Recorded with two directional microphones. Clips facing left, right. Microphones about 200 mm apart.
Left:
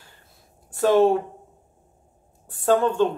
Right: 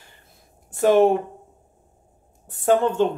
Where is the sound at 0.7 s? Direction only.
20° right (ahead or behind).